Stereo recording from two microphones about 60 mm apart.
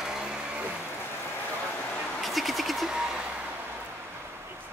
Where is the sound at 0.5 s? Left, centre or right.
Right.